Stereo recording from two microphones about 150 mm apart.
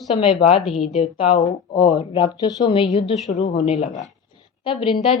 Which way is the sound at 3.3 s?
50° left (ahead or behind).